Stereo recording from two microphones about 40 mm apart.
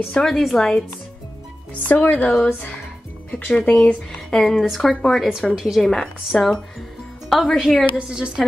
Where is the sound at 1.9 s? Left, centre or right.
Left.